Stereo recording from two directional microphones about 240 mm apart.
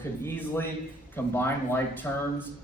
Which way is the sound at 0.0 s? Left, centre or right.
Centre.